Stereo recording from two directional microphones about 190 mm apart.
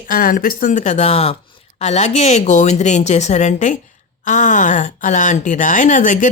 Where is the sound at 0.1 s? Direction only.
45° left (ahead or behind).